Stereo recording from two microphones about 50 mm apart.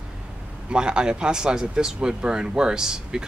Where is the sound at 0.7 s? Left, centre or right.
Centre.